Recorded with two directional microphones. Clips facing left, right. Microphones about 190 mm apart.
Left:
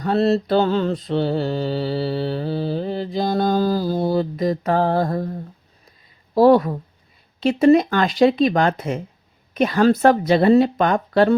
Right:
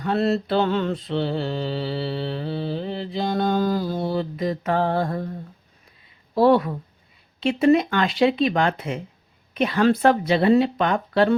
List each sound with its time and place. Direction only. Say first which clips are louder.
0.0 s mantra: left 4 dB; 35° left (ahead or behind)
6.3 s mantra: left 4 dB; 40° left (ahead or behind)
9.6 s a woman's voice: left 3 dB; 40° left (ahead or behind)